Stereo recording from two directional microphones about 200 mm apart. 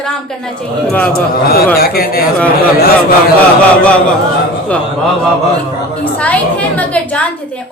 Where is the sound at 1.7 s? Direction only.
50° left (ahead or behind).